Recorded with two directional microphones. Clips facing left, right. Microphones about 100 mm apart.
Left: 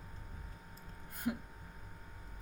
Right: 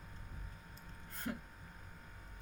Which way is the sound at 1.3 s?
10° left (ahead or behind).